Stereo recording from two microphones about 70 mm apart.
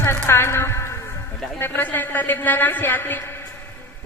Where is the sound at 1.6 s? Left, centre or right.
Left.